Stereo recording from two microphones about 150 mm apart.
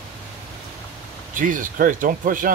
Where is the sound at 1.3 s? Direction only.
60° right (ahead or behind).